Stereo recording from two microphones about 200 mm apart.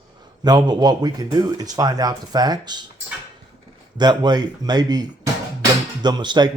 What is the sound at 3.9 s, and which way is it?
Speech, 20° right (ahead or behind).